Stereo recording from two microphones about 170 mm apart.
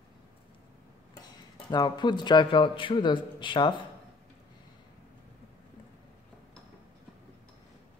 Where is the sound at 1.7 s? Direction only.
25° left (ahead or behind).